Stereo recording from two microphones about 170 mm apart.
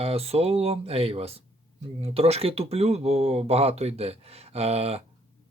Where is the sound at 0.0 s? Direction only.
35° right (ahead or behind).